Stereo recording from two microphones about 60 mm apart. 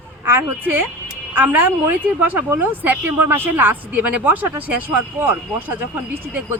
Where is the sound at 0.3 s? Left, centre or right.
Right.